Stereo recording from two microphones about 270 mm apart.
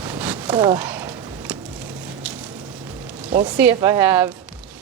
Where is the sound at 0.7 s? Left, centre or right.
Centre.